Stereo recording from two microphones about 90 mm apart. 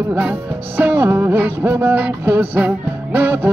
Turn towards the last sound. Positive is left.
turn(degrees=-25)  # may be behind; listen again after turning